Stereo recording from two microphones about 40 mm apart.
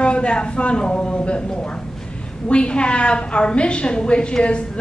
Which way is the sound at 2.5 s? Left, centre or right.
Left.